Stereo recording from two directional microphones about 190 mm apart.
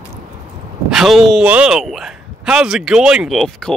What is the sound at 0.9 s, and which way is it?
Speech, centre (ahead or behind).